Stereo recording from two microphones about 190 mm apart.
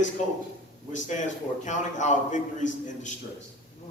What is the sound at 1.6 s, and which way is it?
A man's voice, 40° left (ahead or behind).